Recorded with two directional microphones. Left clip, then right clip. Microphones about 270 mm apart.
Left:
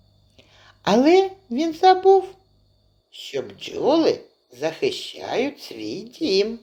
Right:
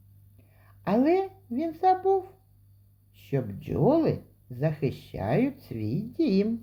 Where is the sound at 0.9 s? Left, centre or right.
Left.